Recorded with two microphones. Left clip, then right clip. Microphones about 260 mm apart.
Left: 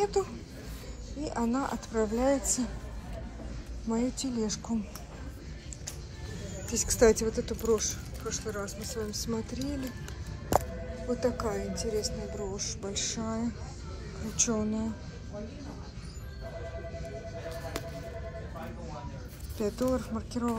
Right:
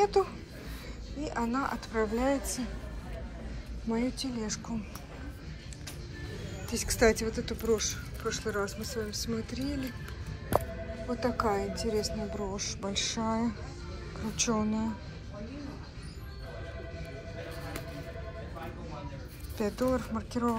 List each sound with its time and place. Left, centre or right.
0.0 s a woman's voice: centre
4.4 s a woman's voice: centre
6.7 s a woman's voice: centre
11.1 s a woman's voice: centre
19.6 s a woman's voice: centre